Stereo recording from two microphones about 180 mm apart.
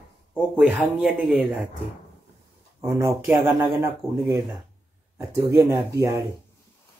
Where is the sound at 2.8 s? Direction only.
20° right (ahead or behind).